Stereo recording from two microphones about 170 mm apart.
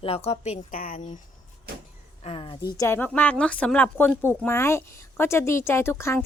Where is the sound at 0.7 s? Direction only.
55° left (ahead or behind).